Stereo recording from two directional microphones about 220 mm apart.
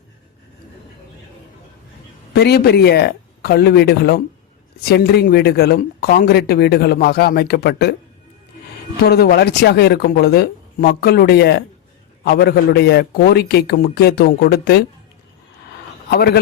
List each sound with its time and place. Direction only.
2.3 s speech: 45° left (ahead or behind)
9.0 s speech: 45° left (ahead or behind)
16.0 s speech: 45° left (ahead or behind)